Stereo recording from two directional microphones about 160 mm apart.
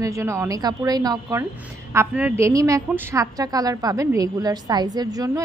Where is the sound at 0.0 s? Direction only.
20° right (ahead or behind).